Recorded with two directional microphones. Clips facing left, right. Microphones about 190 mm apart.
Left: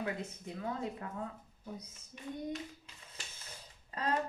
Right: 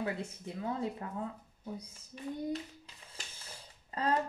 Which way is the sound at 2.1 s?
35° right (ahead or behind).